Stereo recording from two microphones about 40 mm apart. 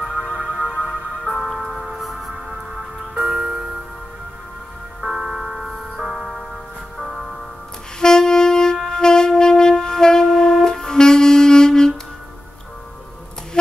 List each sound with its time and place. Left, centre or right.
0.1 s music: right
0.8 s music: centre
5.0 s music: centre
8.0 s saxophone: centre
8.7 s wind instrument: centre